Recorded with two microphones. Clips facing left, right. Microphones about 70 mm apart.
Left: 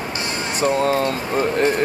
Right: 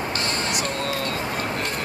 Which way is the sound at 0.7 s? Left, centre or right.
Left.